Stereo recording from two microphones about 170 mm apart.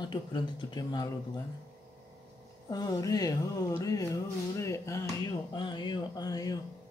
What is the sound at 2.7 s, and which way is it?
Speech, 20° left (ahead or behind).